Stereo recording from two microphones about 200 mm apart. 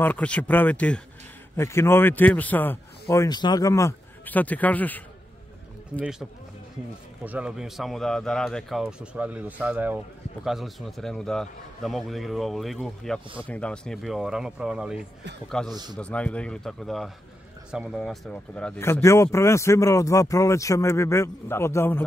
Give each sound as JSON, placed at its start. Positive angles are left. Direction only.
{"t": 0.0, "sound": "speech", "side_deg": 5}
{"t": 7.2, "sound": "a man's voice", "side_deg": -5}
{"t": 15.7, "sound": "a man's voice", "side_deg": -20}
{"t": 16.0, "sound": "a man's voice", "side_deg": 5}